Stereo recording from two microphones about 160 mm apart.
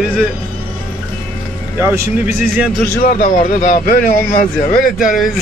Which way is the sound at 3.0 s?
55° left (ahead or behind).